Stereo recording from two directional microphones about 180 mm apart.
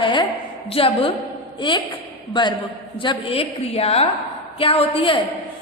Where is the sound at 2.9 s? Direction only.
30° left (ahead or behind).